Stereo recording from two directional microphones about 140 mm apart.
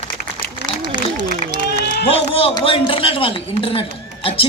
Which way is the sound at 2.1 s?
40° left (ahead or behind).